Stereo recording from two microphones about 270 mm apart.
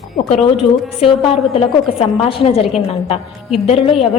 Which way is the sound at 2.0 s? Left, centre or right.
Left.